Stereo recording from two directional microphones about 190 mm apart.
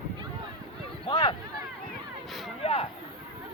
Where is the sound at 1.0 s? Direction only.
30° left (ahead or behind).